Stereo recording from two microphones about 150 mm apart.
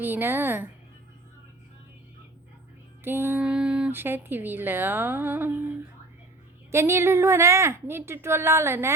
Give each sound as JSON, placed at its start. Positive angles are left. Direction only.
{"t": 0.0, "sound": "speech", "side_deg": -15}
{"t": 3.0, "sound": "speech", "side_deg": -15}
{"t": 6.7, "sound": "speech", "side_deg": -20}